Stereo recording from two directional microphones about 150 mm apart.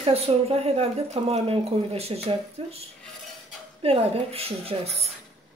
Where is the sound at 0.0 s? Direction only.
40° right (ahead or behind).